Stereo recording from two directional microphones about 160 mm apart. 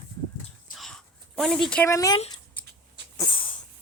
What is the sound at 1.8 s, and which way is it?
Speech, 20° left (ahead or behind).